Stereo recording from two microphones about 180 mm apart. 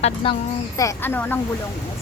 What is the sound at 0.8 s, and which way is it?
Speech, 15° left (ahead or behind).